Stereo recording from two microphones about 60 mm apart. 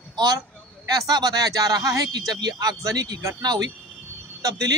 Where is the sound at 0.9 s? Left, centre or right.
Right.